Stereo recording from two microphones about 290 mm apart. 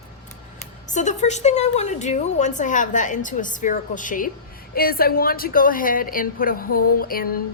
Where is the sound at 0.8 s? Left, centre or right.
Left.